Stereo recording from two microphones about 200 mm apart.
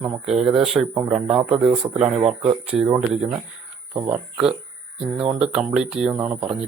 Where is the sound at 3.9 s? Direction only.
10° right (ahead or behind).